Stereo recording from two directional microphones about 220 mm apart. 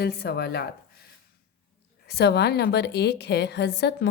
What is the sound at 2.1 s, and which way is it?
A woman's voice, 50° left (ahead or behind).